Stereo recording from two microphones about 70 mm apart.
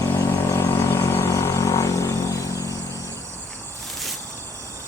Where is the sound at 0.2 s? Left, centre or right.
Left.